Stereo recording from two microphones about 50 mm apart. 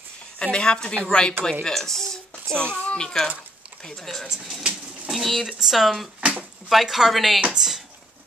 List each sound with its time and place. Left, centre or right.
0.4 s speech: centre
5.5 s speech: centre
7.5 s a sound: centre